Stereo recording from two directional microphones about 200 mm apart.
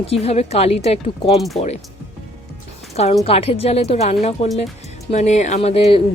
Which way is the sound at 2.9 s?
30° left (ahead or behind).